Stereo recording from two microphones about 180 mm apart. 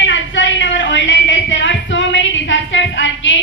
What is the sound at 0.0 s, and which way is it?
Music, 90° left.